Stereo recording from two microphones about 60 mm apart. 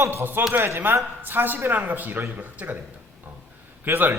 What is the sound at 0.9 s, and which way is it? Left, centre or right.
A man's voice, right.